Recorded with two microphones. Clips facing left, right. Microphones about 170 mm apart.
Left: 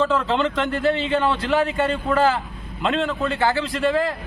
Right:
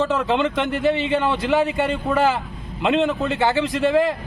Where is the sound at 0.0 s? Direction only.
15° right (ahead or behind).